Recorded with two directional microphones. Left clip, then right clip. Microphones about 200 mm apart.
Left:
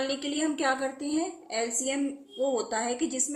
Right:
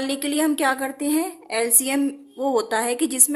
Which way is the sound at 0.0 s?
55° right (ahead or behind).